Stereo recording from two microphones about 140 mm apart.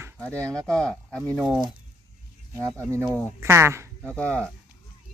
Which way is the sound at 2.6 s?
20° right (ahead or behind).